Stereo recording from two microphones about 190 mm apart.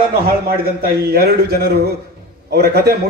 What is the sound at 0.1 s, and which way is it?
A man's voice, 55° right (ahead or behind).